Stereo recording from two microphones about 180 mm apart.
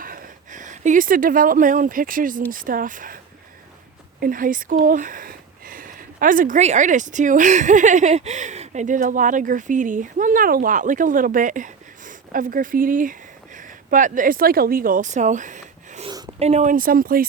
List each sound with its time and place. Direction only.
0.0 s speech: 50° right (ahead or behind)
4.2 s speech: 50° right (ahead or behind)
16.0 s a sound: 25° right (ahead or behind)
16.4 s speech: 40° right (ahead or behind)